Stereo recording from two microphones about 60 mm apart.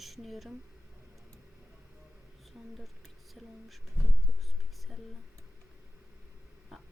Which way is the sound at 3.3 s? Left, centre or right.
Centre.